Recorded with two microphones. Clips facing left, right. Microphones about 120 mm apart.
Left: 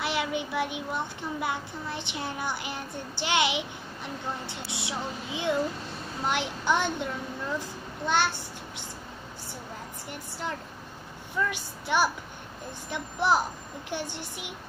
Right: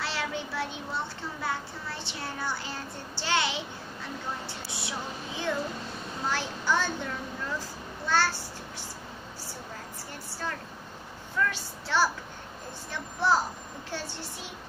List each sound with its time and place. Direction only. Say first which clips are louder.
0.0 s a child's voice: left 4 dB; 15° left (ahead or behind)
8.1 s speech: even; 20° left (ahead or behind)
11.3 s a child's voice: even; 15° left (ahead or behind)